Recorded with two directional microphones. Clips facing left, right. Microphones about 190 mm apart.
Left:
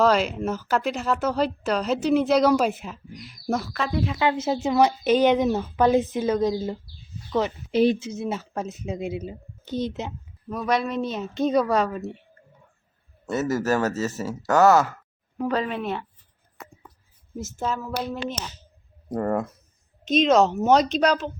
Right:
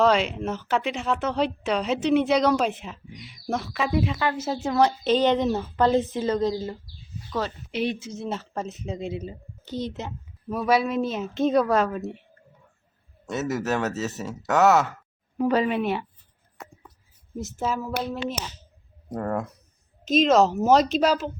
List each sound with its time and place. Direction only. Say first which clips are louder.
0.0 s speech: left 1 dB; centre (ahead or behind)
4.2 s speech: left 3 dB; 20° left (ahead or behind)
7.7 s a woman's voice: left 9 dB; 35° left (ahead or behind)
8.2 s speech: left 2 dB; 5° left (ahead or behind)
9.6 s a child's voice: left 3 dB; 20° left (ahead or behind)
10.5 s speech: right 2 dB; 5° right (ahead or behind)
13.3 s speech: left 3 dB; centre (ahead or behind)
17.3 s speech: right 1 dB; centre (ahead or behind)
19.1 s speech: left 3 dB; 5° left (ahead or behind)